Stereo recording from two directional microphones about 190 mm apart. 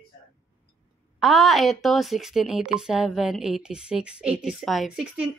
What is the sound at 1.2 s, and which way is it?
A woman's voice, centre (ahead or behind).